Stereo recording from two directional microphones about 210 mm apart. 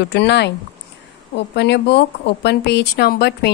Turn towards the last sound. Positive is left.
turn(degrees=50)  # may be behind; listen again after turning